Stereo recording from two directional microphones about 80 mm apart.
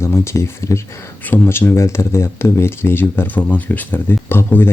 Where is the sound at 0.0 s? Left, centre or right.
Left.